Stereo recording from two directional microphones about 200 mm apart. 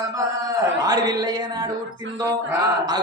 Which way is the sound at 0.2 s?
15° right (ahead or behind).